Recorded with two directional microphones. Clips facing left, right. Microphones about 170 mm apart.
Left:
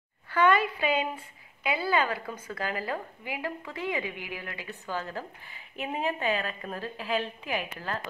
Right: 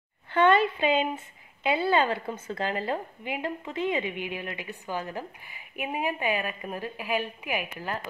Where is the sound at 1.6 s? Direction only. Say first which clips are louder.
Right 3 dB; 25° right (ahead or behind).